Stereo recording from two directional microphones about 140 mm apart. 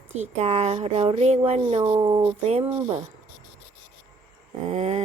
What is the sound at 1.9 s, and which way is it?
Speech, 25° right (ahead or behind).